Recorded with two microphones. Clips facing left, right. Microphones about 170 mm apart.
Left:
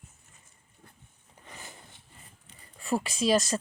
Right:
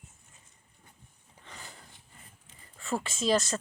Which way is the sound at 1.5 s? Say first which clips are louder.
Left 1 dB; 15° left (ahead or behind).